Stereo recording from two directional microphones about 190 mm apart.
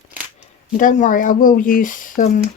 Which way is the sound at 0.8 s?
45° left (ahead or behind).